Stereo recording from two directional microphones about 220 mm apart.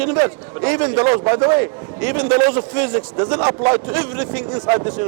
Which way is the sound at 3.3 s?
25° right (ahead or behind).